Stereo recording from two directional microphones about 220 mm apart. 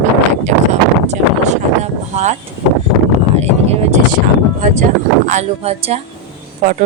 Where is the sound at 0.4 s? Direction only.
30° right (ahead or behind).